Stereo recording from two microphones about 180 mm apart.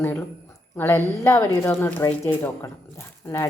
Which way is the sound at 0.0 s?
10° left (ahead or behind).